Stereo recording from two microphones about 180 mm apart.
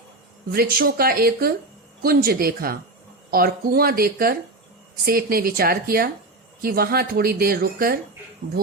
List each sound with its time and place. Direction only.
0.5 s speech: 55° right (ahead or behind)